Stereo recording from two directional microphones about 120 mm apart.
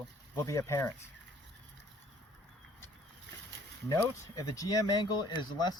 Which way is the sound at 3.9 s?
25° left (ahead or behind).